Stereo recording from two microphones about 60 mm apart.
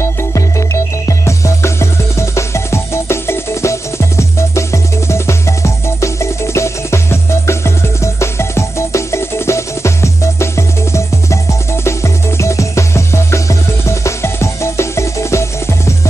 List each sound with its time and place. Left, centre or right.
0.0 s music: left